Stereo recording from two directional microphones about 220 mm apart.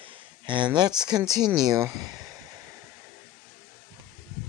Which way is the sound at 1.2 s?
15° right (ahead or behind).